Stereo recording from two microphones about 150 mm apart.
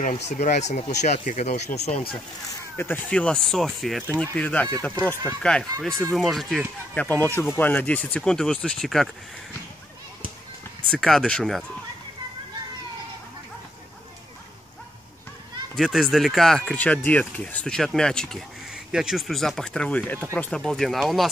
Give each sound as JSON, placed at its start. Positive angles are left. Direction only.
{"t": 0.0, "sound": "speech", "side_deg": 50}
{"t": 2.8, "sound": "speech", "side_deg": 10}
{"t": 7.0, "sound": "speech", "side_deg": 10}
{"t": 10.9, "sound": "speech", "side_deg": 0}
{"t": 15.7, "sound": "speech", "side_deg": 0}